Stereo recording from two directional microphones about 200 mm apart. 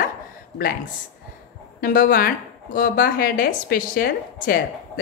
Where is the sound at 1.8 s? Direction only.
45° left (ahead or behind).